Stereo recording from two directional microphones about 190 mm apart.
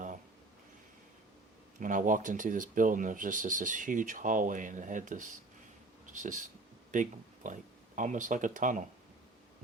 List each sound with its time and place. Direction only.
1.8 s speech: 45° right (ahead or behind)